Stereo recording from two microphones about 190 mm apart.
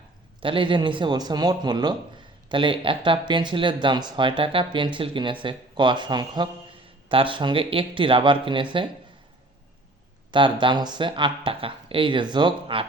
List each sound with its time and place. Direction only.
0.3 s speech: 25° right (ahead or behind)
10.3 s speech: 25° right (ahead or behind)